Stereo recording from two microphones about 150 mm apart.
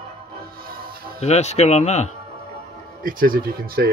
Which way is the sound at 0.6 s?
80° right.